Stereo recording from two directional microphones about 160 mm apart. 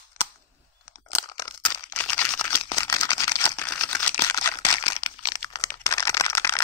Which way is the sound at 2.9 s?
20° left (ahead or behind).